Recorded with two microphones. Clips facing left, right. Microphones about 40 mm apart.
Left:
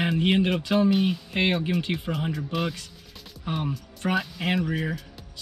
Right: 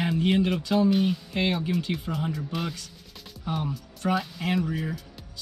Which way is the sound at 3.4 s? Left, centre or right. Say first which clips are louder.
Left 1 dB; left.